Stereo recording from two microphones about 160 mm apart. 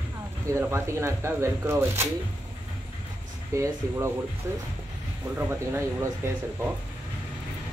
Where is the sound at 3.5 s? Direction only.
20° right (ahead or behind).